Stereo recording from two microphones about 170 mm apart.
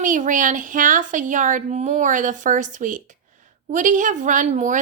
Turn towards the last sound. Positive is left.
turn(degrees=-45)  # may be behind; listen again after turning